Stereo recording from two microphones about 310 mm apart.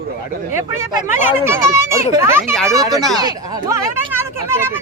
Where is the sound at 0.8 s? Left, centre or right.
Centre.